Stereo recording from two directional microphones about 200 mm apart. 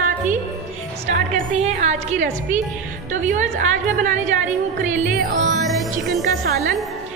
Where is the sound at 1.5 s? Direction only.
35° right (ahead or behind).